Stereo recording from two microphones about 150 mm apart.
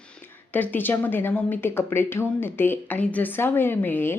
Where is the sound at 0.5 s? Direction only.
10° left (ahead or behind).